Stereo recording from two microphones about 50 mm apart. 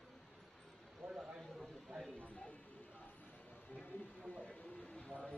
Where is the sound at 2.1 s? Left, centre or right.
Left.